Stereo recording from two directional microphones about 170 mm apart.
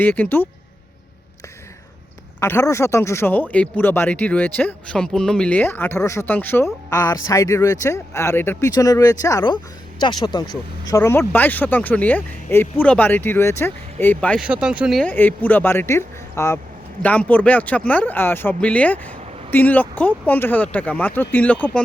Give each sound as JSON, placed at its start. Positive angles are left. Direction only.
{"t": 0.0, "sound": "speech", "side_deg": 10}
{"t": 2.4, "sound": "speech", "side_deg": 15}
{"t": 14.4, "sound": "speech", "side_deg": -5}
{"t": 15.0, "sound": "speech", "side_deg": 10}